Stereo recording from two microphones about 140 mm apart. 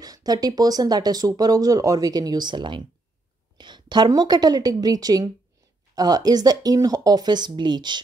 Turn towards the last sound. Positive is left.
turn(degrees=-30)  # may be behind; listen again after turning